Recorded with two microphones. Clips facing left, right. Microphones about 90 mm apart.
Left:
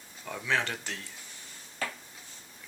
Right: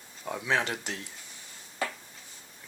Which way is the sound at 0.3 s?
20° right (ahead or behind).